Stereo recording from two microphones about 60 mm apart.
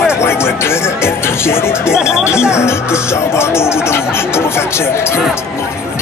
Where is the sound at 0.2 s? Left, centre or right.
Left.